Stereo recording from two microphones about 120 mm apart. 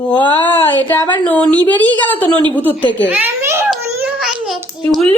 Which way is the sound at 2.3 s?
45° right (ahead or behind).